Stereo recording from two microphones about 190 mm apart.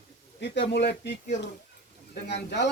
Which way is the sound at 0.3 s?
65° left (ahead or behind).